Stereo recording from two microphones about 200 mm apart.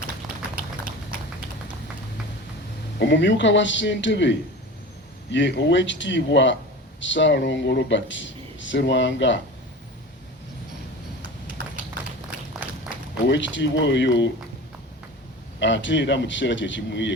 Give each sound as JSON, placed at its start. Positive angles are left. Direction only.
{"t": 3.0, "sound": "speech", "side_deg": 60}
{"t": 13.2, "sound": "speech", "side_deg": 65}
{"t": 15.6, "sound": "speech", "side_deg": 65}